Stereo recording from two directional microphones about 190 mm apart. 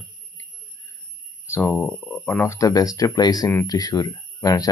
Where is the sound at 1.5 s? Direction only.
10° left (ahead or behind).